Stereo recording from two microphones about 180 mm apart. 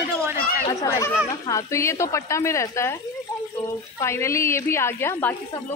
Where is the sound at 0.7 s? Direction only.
20° left (ahead or behind).